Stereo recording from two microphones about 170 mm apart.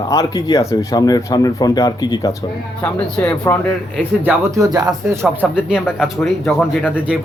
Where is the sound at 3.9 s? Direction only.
10° right (ahead or behind).